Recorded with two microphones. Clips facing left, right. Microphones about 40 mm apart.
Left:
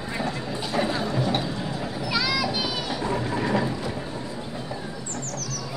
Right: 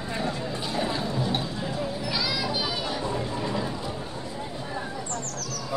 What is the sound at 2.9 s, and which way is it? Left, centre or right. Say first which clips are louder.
Sheep: left 3 dB; left.